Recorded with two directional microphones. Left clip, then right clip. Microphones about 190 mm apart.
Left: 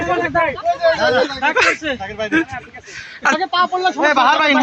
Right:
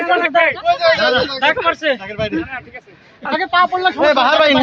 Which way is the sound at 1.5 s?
20° left (ahead or behind).